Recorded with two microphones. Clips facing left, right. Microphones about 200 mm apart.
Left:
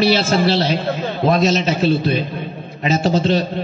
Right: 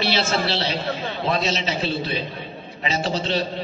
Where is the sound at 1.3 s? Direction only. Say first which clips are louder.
Left 8 dB; 45° left (ahead or behind).